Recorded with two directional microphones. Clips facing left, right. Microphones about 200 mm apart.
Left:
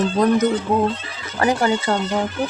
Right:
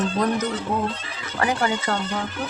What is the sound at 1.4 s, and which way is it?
Speech, 30° left (ahead or behind).